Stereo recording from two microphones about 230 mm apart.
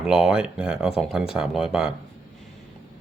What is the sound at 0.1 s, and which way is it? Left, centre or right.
Speech, centre.